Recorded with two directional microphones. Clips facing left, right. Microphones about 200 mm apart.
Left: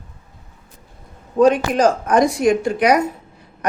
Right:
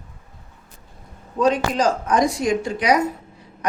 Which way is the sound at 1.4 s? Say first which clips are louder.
Left 5 dB; 55° left (ahead or behind).